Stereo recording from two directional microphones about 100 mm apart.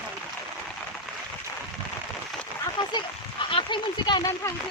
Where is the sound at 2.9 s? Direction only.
55° left (ahead or behind).